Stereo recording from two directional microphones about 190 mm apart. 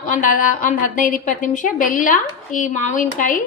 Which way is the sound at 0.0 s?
45° left (ahead or behind).